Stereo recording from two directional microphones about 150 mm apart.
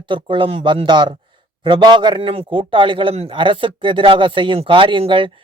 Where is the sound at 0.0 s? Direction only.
35° right (ahead or behind).